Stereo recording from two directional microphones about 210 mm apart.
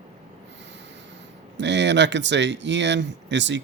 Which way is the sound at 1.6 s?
55° right (ahead or behind).